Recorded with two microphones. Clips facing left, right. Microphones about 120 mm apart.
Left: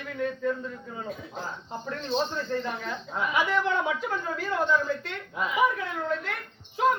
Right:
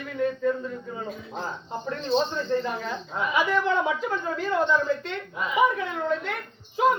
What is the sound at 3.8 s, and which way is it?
Speech, 20° right (ahead or behind).